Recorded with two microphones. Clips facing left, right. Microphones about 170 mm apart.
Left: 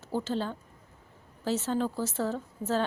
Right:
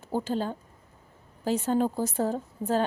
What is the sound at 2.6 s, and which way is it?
Speech, 35° right (ahead or behind).